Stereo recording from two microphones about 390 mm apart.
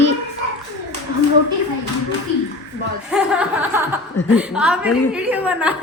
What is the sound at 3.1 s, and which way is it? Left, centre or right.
Speech, centre.